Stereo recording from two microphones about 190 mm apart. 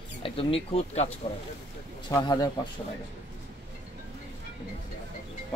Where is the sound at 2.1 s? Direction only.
20° left (ahead or behind).